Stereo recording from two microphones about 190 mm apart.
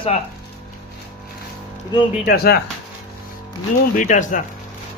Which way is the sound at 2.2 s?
55° left (ahead or behind).